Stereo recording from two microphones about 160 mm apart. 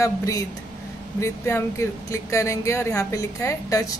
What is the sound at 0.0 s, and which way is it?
Speech, 20° left (ahead or behind).